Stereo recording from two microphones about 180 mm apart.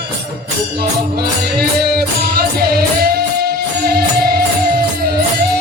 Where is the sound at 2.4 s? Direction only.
60° right (ahead or behind).